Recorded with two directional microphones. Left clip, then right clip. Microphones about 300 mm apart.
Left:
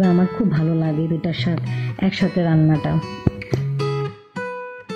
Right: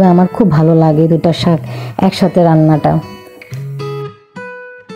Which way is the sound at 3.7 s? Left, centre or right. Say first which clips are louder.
Right 4 dB; right.